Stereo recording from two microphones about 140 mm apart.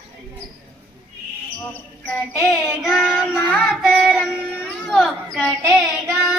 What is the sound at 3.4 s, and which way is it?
Child singing, 10° left (ahead or behind).